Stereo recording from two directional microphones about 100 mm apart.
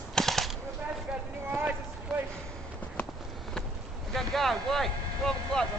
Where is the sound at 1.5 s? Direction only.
20° right (ahead or behind).